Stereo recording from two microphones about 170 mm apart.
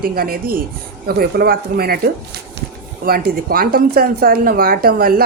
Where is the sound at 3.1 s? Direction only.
60° right (ahead or behind).